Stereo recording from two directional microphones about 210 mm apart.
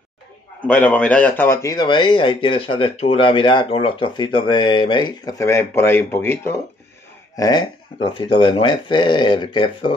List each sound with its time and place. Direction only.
0.7 s speech: 5° left (ahead or behind); by 9.9 s 25° left (ahead or behind)